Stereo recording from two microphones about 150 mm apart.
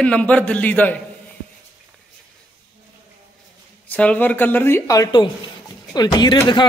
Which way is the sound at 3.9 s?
10° left (ahead or behind).